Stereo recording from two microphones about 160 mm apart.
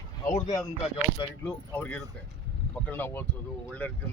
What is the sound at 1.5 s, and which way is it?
Speech, 10° left (ahead or behind).